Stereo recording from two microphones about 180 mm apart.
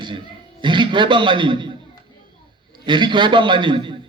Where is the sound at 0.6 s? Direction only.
25° right (ahead or behind).